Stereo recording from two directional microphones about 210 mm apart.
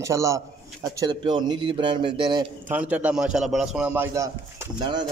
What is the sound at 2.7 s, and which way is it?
A man's voice, 10° right (ahead or behind).